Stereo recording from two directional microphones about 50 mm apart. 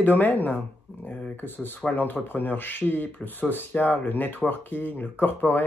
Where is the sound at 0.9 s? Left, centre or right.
Left.